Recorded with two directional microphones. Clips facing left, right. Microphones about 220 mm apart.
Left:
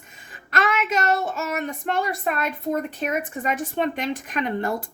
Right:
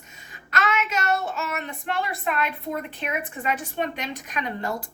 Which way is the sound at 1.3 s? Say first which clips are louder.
Left 4 dB; 45° left (ahead or behind).